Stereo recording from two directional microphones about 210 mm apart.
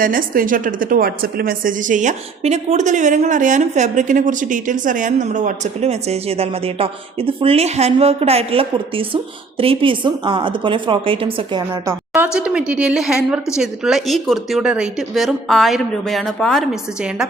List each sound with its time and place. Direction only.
0.0 s a woman's voice: 40° right (ahead or behind); by 11.6 s 25° right (ahead or behind)
11.7 s a woman's voice: 10° right (ahead or behind)